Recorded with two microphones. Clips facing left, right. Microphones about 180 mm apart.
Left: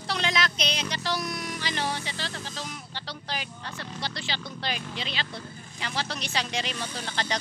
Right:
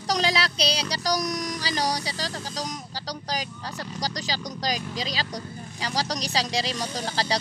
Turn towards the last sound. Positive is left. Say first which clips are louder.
# right 4 dB
turn(degrees=-35)  # may be behind; listen again after turning